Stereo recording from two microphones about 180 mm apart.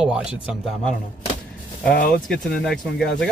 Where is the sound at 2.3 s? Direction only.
Centre (ahead or behind).